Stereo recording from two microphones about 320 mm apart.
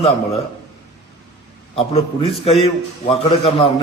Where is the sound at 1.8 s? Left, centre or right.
Centre.